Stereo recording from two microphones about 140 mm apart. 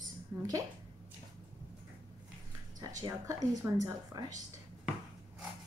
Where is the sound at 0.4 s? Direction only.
25° right (ahead or behind).